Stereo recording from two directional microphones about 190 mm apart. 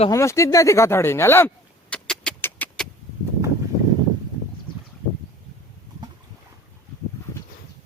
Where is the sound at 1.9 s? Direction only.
5° left (ahead or behind).